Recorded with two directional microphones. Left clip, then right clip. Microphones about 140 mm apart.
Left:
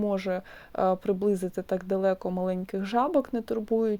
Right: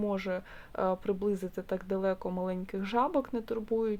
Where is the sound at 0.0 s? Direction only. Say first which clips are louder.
Left 5 dB; 30° left (ahead or behind).